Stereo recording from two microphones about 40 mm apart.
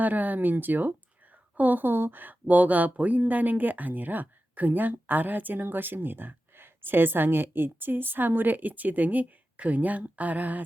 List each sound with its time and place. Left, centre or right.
0.0 s speech: right